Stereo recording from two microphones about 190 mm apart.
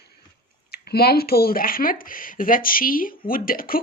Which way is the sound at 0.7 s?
55° left (ahead or behind).